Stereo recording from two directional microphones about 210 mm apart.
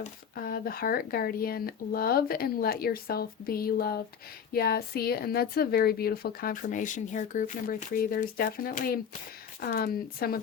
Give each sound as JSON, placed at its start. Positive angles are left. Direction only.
{"t": 0.0, "sound": "speech", "side_deg": 45}